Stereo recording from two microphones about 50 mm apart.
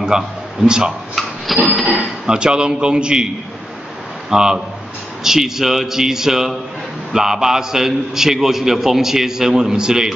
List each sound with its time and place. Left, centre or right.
0.0 s a man's voice: centre
1.5 s a sound: centre
2.2 s a man's voice: centre
4.3 s a man's voice: centre